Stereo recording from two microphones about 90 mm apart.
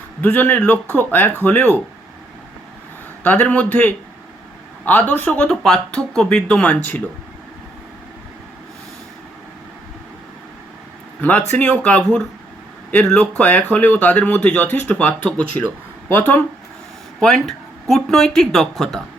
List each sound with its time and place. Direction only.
0.2 s a man's voice: 20° left (ahead or behind)
3.2 s a man's voice: 20° left (ahead or behind)
11.2 s a man's voice: 15° left (ahead or behind)
17.2 s speech: 5° left (ahead or behind)